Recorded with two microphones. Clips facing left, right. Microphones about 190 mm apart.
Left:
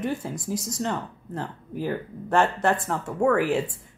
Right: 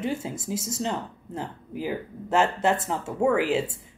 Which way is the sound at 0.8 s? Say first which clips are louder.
Left 1 dB; 15° right (ahead or behind).